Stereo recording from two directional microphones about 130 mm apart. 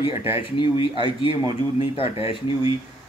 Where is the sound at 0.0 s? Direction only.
45° left (ahead or behind).